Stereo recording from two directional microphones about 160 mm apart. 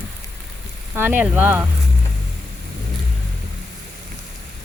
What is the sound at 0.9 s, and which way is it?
Speech, 10° right (ahead or behind).